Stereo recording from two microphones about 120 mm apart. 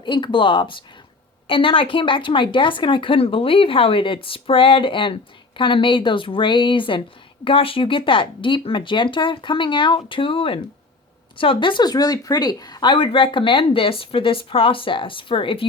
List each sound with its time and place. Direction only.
0.0 s speech: 40° left (ahead or behind)